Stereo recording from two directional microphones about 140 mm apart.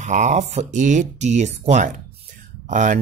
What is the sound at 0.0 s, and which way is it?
Speech, 60° right (ahead or behind).